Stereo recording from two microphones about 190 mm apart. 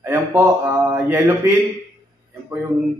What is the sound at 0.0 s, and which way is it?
A man's voice, 10° right (ahead or behind).